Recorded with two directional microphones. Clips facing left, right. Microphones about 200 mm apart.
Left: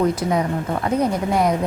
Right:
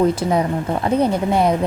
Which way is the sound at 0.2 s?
30° right (ahead or behind).